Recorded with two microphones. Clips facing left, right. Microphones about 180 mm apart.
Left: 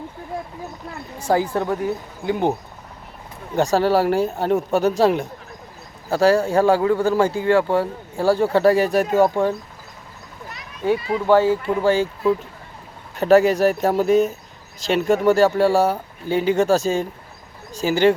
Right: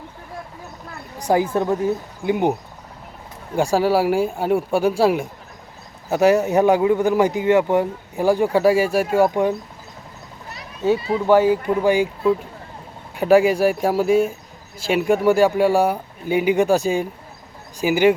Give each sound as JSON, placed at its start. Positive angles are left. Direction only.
{"t": 1.3, "sound": "speech", "side_deg": -15}
{"t": 10.9, "sound": "speech", "side_deg": -30}
{"t": 11.3, "sound": "speech", "side_deg": -15}
{"t": 13.1, "sound": "speech", "side_deg": -10}